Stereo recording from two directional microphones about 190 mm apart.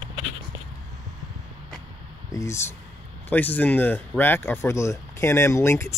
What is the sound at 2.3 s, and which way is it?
Speech, 15° left (ahead or behind).